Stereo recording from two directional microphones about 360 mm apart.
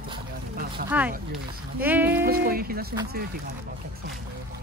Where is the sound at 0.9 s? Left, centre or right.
Centre.